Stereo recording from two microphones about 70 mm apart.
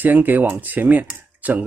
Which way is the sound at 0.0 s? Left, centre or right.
Right.